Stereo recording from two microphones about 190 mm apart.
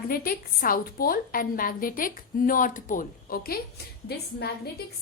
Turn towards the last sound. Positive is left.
turn(degrees=55)  # may be behind; listen again after turning